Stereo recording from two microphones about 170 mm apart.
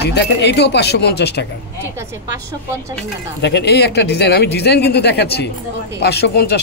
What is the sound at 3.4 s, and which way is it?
Speech, 80° left.